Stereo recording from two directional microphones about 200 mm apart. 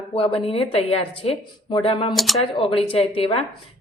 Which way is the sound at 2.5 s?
30° left (ahead or behind).